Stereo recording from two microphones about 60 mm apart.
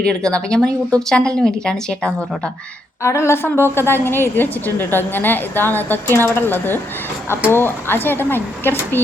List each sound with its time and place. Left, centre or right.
0.0 s speech: centre
3.0 s a woman's voice: left